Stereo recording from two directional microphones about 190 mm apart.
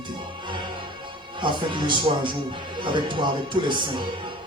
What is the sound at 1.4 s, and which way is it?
Speech, 25° right (ahead or behind).